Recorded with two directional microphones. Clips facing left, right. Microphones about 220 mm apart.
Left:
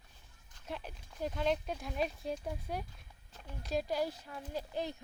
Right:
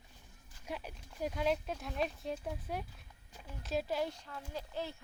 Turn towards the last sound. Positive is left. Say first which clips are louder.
# left 3 dB
turn(degrees=15)  # may be behind; listen again after turning